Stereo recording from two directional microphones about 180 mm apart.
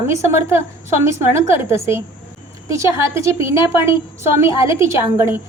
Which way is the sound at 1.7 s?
15° right (ahead or behind).